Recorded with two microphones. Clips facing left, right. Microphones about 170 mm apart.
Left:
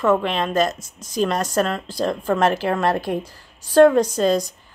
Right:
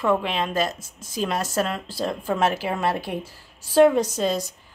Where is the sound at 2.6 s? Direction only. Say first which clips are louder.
Left 4 dB; 90° left.